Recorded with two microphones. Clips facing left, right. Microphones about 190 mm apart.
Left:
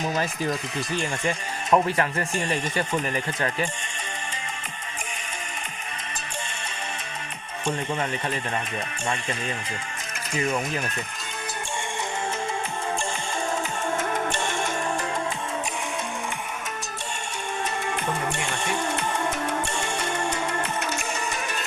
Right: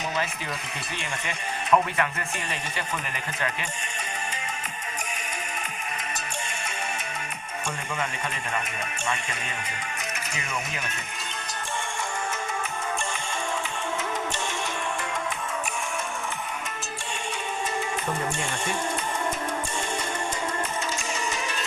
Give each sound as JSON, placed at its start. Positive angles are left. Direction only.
{"t": 0.9, "sound": "speech", "side_deg": 35}
{"t": 10.3, "sound": "speech", "side_deg": 35}
{"t": 14.0, "sound": "music", "side_deg": 55}